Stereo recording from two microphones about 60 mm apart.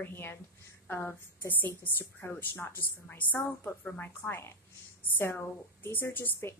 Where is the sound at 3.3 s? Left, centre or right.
Left.